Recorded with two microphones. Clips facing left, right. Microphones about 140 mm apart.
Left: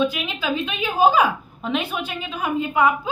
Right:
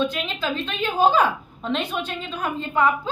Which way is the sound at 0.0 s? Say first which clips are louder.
Left 2 dB; 5° left (ahead or behind).